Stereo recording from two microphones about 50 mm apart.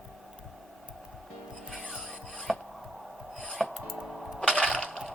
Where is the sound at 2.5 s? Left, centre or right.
Centre.